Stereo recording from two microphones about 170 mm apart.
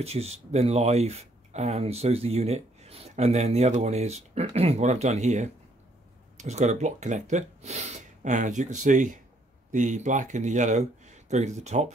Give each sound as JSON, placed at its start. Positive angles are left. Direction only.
{"t": 0.0, "sound": "speech", "side_deg": -35}